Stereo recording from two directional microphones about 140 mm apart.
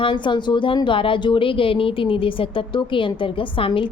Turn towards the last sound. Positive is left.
turn(degrees=40)  # may be behind; listen again after turning